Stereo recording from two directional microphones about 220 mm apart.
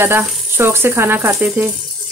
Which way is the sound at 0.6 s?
10° right (ahead or behind).